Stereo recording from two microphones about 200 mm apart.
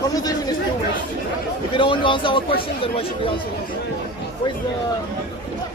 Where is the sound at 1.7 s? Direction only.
25° left (ahead or behind).